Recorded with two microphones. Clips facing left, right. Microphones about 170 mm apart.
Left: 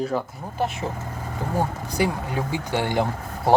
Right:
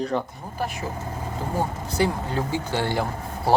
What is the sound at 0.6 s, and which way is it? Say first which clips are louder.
Speech: left 3 dB; 25° left (ahead or behind).